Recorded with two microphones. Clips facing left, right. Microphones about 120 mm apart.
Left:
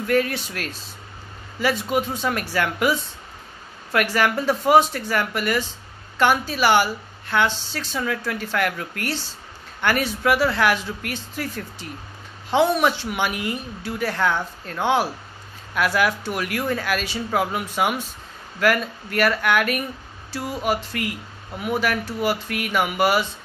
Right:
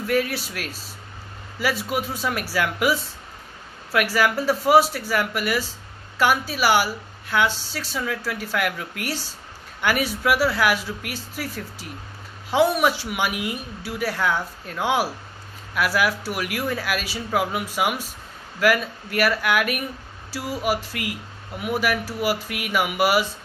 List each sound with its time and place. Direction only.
0.0 s speech: 5° right (ahead or behind)